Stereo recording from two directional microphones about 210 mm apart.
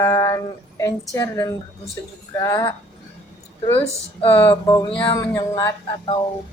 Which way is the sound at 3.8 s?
25° left (ahead or behind).